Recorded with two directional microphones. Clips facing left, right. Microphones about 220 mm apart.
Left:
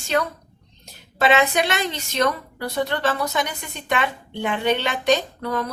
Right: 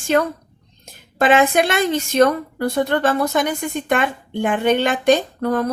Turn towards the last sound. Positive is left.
turn(degrees=-50)  # may be behind; listen again after turning